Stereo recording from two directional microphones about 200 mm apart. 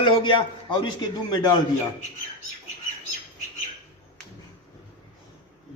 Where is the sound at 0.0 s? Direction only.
25° left (ahead or behind).